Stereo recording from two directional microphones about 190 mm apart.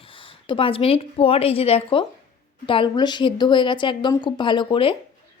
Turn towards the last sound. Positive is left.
turn(degrees=25)  # may be behind; listen again after turning